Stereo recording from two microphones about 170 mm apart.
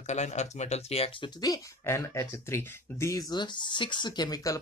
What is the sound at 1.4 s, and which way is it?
Speech, 20° left (ahead or behind).